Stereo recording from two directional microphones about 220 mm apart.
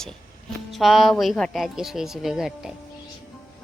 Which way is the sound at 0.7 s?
Centre (ahead or behind).